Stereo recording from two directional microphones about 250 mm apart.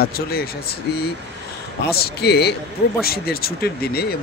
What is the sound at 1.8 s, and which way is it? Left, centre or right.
Speech, left.